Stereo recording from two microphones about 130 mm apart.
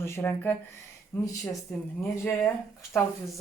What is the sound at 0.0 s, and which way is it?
Speech, 20° left (ahead or behind).